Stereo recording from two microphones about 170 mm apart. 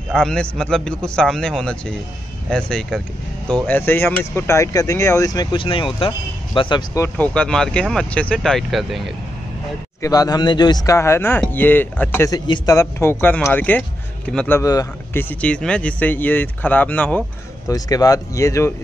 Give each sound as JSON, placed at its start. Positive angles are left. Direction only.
{"t": 0.1, "sound": "a man's voice", "side_deg": 5}
{"t": 7.0, "sound": "a man's voice", "side_deg": 10}
{"t": 10.0, "sound": "speech", "side_deg": 20}
{"t": 14.6, "sound": "speech", "side_deg": 20}
{"t": 17.6, "sound": "speech", "side_deg": 20}